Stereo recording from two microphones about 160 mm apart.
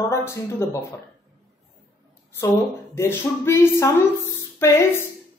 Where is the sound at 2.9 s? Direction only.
15° left (ahead or behind).